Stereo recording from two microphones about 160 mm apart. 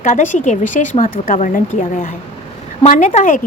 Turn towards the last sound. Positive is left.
turn(degrees=55)  # may be behind; listen again after turning